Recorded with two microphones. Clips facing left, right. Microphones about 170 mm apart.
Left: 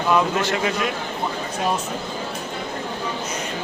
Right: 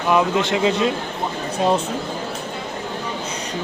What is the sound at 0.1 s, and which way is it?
Speech, 20° right (ahead or behind).